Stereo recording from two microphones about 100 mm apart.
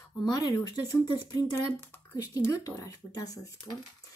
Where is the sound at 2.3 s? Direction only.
35° left (ahead or behind).